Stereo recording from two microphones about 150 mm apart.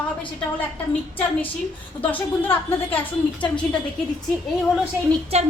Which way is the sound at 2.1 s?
15° left (ahead or behind).